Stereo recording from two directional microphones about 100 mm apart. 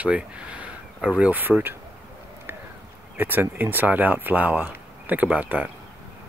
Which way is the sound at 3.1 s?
20° right (ahead or behind).